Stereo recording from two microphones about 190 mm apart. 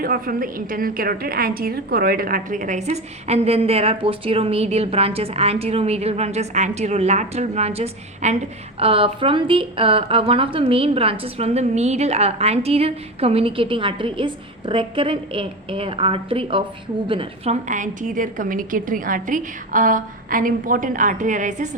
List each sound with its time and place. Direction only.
0.0 s a woman's voice: 50° right (ahead or behind)